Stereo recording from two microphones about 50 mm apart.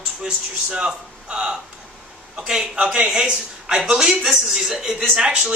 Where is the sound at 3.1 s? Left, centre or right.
Centre.